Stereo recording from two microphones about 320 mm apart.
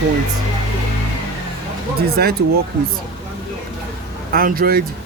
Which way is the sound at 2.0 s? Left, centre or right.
Right.